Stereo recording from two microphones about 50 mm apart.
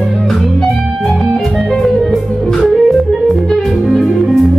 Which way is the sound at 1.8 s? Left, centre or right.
Centre.